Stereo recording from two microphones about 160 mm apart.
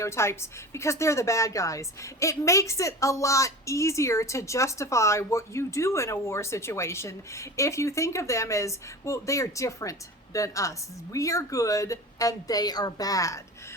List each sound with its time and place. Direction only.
0.0 s a woman's voice: 15° left (ahead or behind)